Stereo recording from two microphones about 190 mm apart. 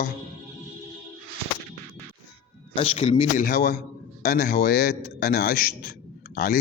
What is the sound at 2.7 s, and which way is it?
Speech, 30° left (ahead or behind).